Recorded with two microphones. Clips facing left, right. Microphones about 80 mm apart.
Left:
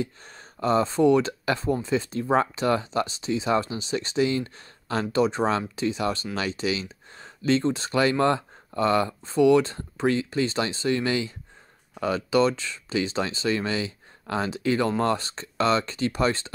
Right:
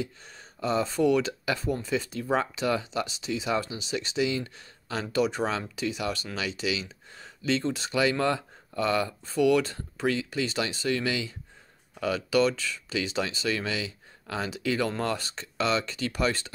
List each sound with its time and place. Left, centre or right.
0.0 s speech: left